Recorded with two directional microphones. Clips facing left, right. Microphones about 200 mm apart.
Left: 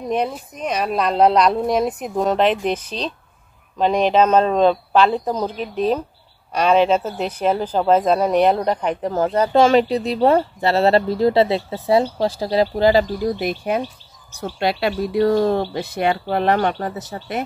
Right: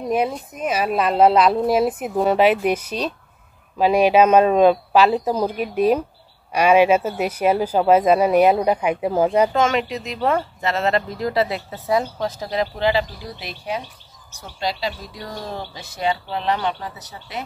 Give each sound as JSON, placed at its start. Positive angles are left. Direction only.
{"t": 0.6, "sound": "speech", "side_deg": -5}
{"t": 9.5, "sound": "speech", "side_deg": 35}